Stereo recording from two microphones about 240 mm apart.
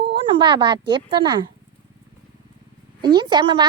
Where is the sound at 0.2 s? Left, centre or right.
Right.